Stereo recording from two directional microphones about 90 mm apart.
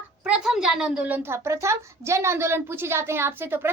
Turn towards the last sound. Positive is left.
turn(degrees=-25)  # may be behind; listen again after turning